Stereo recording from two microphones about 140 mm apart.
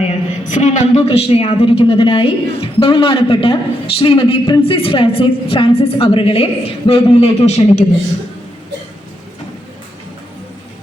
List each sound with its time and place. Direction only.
0.4 s a woman's voice: 60° left (ahead or behind)